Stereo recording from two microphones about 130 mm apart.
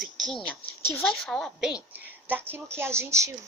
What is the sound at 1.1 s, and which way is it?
A woman's voice, centre (ahead or behind).